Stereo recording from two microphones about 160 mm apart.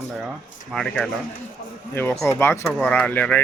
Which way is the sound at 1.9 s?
15° left (ahead or behind).